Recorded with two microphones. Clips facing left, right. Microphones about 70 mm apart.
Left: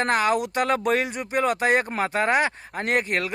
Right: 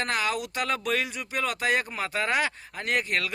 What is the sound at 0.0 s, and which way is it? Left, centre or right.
Speech, left.